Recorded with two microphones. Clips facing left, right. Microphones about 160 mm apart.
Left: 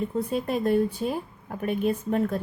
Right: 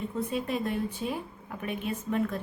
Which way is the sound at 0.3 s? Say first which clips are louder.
Left 7 dB; 40° left (ahead or behind).